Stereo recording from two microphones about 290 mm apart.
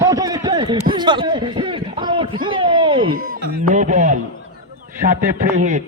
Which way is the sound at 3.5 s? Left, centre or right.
Right.